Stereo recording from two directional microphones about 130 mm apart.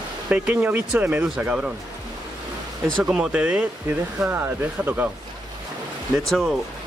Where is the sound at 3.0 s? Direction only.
5° right (ahead or behind).